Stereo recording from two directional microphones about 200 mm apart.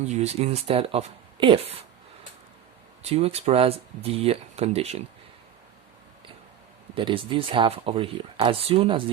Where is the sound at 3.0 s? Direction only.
30° right (ahead or behind).